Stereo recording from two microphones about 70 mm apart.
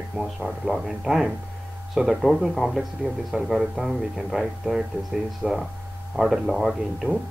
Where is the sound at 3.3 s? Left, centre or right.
Centre.